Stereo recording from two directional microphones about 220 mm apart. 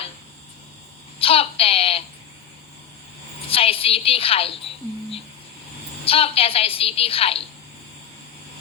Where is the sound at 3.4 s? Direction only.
25° left (ahead or behind).